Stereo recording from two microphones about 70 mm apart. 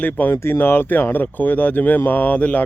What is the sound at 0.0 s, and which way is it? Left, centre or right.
Speech, left.